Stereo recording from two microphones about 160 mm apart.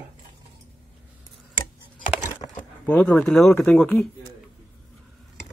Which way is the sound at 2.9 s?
10° left (ahead or behind).